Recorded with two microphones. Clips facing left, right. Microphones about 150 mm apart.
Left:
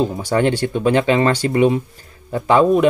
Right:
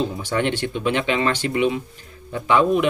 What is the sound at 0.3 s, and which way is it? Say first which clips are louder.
Speech: left 6 dB; 40° left (ahead or behind).